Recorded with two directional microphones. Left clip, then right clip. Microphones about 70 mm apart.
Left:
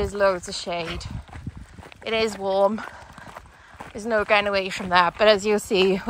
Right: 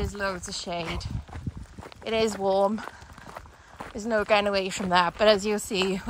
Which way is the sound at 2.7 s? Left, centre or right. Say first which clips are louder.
Left 5 dB; right.